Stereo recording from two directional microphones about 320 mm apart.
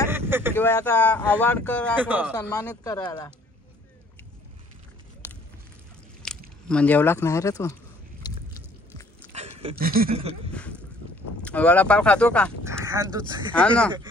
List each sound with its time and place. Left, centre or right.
0.1 s vehicle: centre
0.6 s speech: centre
2.5 s speech: centre
5.2 s a sound: centre
6.2 s speech: centre
8.2 s chewing: centre
9.3 s speech: centre
10.5 s boat: centre
11.4 s speech: centre
12.6 s speech: centre
13.5 s speech: centre